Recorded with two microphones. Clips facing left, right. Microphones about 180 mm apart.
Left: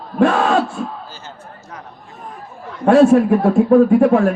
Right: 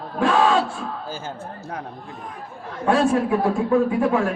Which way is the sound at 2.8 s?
65° left (ahead or behind).